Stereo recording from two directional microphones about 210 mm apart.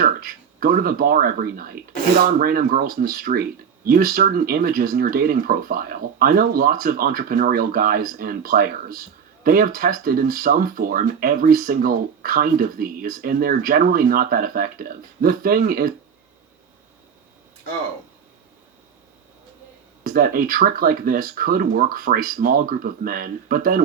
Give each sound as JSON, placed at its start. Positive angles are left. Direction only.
{"t": 0.0, "sound": "speech", "side_deg": -45}
{"t": 20.1, "sound": "speech", "side_deg": -45}